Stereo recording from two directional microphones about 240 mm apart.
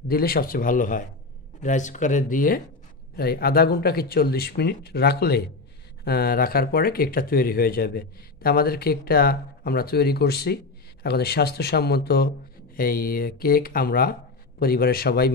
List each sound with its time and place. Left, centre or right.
0.1 s speech: left